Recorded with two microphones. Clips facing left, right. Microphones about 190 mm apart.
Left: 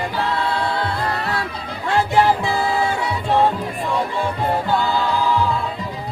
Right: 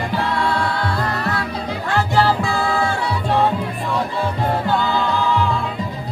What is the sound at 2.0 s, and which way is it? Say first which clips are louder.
Music: left 1 dB; 20° left (ahead or behind).